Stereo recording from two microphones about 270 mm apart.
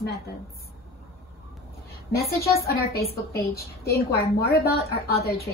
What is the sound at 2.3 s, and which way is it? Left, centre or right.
Speech, left.